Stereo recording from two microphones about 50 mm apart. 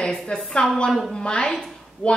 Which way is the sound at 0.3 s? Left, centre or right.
Centre.